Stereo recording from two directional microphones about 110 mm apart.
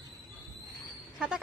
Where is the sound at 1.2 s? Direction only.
5° right (ahead or behind).